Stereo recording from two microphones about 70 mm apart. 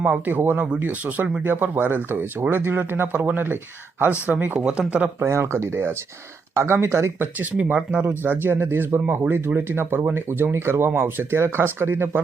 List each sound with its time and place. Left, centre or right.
0.0 s speech: right
5.2 s speech: right
7.5 s speech: centre; by 12.2 s right